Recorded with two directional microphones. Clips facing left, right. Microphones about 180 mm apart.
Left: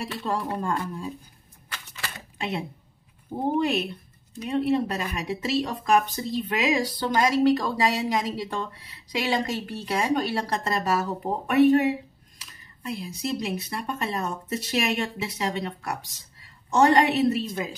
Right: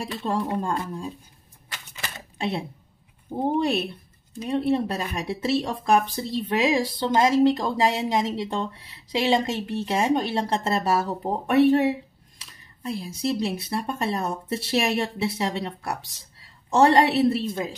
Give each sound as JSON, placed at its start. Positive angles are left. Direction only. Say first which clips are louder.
{"t": 0.1, "sound": "speech", "louder": "right 5 dB", "side_deg": -25}
{"t": 1.7, "sound": "typewriter", "louder": "even", "side_deg": -20}
{"t": 2.3, "sound": "speech", "louder": "right 3 dB", "side_deg": -30}